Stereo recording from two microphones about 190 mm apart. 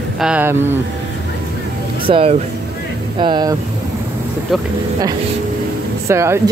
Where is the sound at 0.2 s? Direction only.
10° right (ahead or behind).